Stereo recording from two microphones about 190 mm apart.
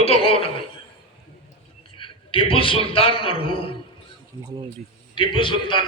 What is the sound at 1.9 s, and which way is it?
A man's voice, 25° left (ahead or behind).